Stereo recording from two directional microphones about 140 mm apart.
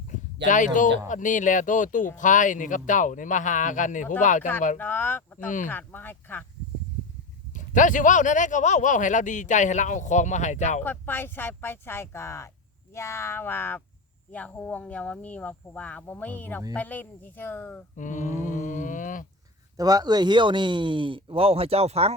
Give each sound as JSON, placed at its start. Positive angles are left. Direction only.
{"t": 0.1, "sound": "speech", "side_deg": 65}
{"t": 4.8, "sound": "speech", "side_deg": 15}
{"t": 7.5, "sound": "speech", "side_deg": 65}
{"t": 10.8, "sound": "speech", "side_deg": 15}
{"t": 17.9, "sound": "speech", "side_deg": 65}
{"t": 19.7, "sound": "speech", "side_deg": -25}